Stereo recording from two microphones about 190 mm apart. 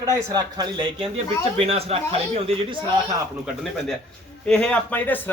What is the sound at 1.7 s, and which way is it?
A man's voice, 30° right (ahead or behind).